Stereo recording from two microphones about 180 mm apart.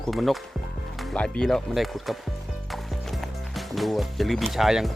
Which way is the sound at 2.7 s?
Centre (ahead or behind).